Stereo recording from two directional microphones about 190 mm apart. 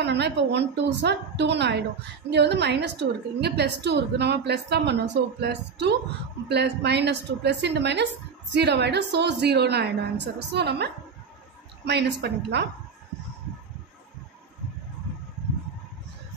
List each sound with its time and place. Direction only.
0.0 s a woman's voice: 65° right (ahead or behind)